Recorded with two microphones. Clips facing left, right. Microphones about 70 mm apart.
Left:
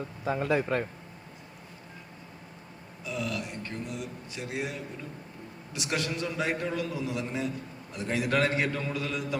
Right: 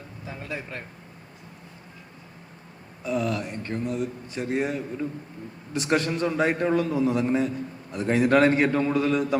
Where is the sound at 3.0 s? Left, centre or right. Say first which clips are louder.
Right 7 dB; right.